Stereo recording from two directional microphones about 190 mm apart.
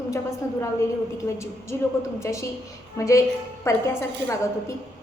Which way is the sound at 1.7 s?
10° left (ahead or behind).